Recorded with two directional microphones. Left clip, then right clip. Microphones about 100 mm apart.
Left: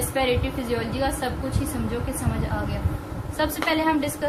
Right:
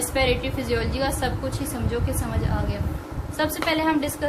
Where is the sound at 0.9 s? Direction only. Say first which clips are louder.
Even; 90° right.